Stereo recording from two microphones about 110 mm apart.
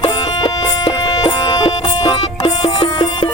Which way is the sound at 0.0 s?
60° left (ahead or behind).